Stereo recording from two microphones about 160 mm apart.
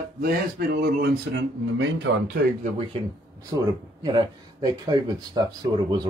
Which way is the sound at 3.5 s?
20° right (ahead or behind).